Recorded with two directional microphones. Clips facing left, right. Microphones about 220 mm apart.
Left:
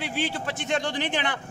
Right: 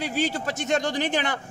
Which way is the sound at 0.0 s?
40° right (ahead or behind).